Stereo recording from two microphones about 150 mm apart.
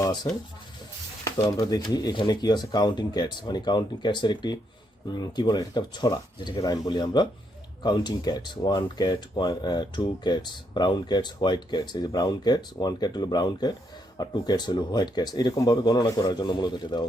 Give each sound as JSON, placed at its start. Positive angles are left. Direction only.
{"t": 0.0, "sound": "speech", "side_deg": 30}